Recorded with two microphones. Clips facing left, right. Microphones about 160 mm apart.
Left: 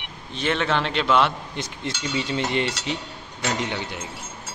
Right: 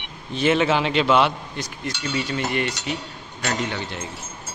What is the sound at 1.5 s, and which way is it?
A man's voice, 25° left (ahead or behind).